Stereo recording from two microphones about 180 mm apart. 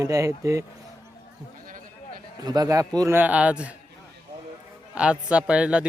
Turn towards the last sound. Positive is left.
turn(degrees=-5)  # may be behind; listen again after turning